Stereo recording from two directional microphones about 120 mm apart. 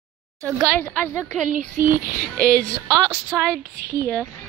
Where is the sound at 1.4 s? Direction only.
90° right.